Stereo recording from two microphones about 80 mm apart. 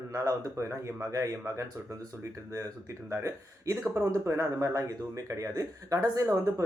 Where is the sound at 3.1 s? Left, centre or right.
Right.